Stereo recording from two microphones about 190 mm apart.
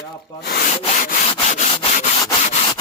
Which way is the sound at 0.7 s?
35° left (ahead or behind).